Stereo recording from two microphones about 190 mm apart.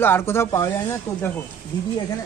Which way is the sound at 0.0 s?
10° left (ahead or behind).